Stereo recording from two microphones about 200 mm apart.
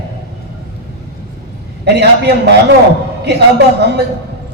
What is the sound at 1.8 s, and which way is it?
Speech, 55° right (ahead or behind).